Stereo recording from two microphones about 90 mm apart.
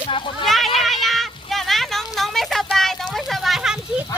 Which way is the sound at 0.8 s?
Centre (ahead or behind).